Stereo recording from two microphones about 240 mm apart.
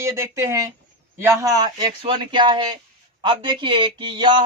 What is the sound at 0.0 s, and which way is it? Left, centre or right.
A man's voice, centre.